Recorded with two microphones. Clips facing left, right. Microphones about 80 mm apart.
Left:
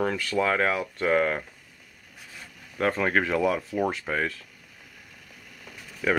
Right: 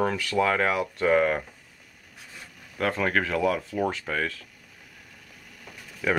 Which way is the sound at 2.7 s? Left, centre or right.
Centre.